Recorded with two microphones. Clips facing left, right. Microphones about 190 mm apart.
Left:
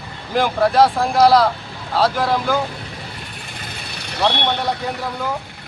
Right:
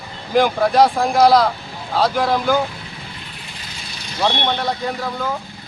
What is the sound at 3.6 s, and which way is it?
Vehicle, 60° left (ahead or behind).